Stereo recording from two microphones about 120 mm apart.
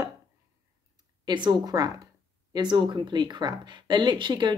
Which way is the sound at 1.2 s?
35° right (ahead or behind).